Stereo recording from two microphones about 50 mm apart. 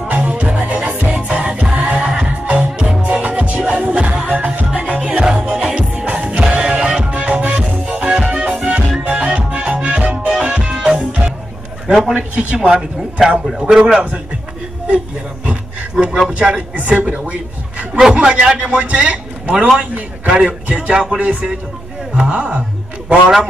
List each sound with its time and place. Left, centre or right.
0.1 s music: right
12.1 s a man's voice: right
16.3 s a man's voice: centre
16.7 s a man's voice: right
17.3 s a sound: right
18.1 s a man's voice: centre